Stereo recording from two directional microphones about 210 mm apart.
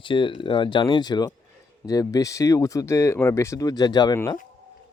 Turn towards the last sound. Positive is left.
turn(degrees=10)  # may be behind; listen again after turning